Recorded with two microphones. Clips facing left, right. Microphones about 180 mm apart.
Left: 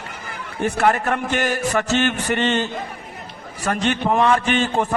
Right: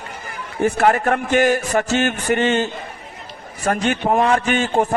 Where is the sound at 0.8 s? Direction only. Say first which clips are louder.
Right 1 dB; 45° right (ahead or behind).